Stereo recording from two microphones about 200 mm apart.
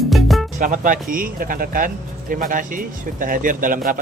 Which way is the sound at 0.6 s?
40° right (ahead or behind).